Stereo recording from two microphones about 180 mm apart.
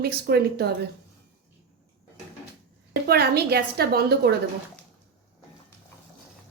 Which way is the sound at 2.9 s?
60° right (ahead or behind).